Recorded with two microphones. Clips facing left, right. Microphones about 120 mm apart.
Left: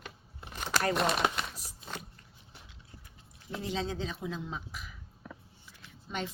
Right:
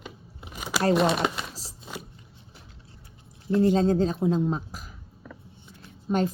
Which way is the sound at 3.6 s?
45° right (ahead or behind).